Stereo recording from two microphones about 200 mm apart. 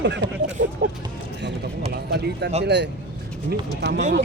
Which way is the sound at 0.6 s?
40° right (ahead or behind).